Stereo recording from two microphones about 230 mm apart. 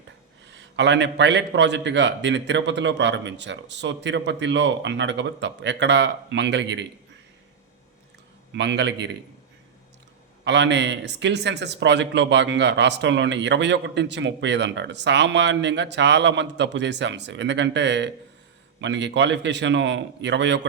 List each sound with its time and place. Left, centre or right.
0.4 s a man's voice: right
8.5 s a man's voice: right
10.4 s a man's voice: right